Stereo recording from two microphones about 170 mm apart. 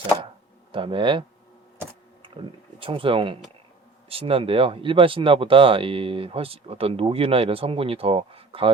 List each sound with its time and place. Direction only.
0.7 s speech: 30° right (ahead or behind)
2.2 s speech: 30° right (ahead or behind)